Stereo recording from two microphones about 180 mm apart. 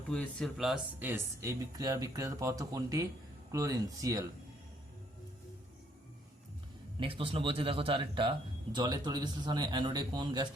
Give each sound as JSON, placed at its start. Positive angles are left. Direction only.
{"t": 0.1, "sound": "speech", "side_deg": 5}
{"t": 7.0, "sound": "speech", "side_deg": -30}